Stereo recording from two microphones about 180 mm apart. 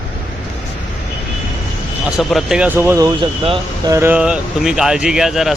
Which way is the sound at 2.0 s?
5° right (ahead or behind).